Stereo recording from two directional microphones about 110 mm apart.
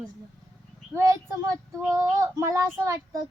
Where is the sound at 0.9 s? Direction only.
25° right (ahead or behind).